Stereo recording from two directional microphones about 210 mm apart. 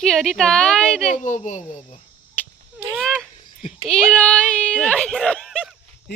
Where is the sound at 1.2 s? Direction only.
35° left (ahead or behind).